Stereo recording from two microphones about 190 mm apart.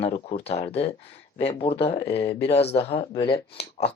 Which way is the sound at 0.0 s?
30° left (ahead or behind).